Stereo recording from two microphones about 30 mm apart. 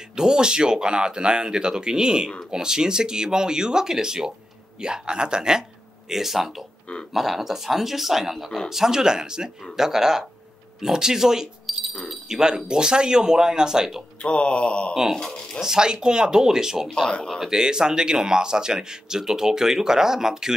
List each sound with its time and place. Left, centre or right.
0.1 s a man's voice: right
6.0 s speech: centre
11.6 s a sound: centre
12.3 s a man's voice: right
14.2 s a sound: left
15.6 s a man's voice: right